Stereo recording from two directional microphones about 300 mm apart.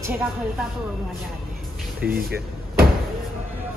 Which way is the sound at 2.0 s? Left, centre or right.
Centre.